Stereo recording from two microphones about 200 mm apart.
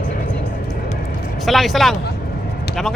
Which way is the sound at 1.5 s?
Centre (ahead or behind).